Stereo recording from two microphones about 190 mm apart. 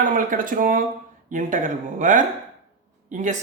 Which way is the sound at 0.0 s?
45° right (ahead or behind).